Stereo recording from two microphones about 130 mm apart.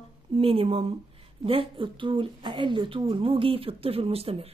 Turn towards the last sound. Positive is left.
turn(degrees=-50)  # may be behind; listen again after turning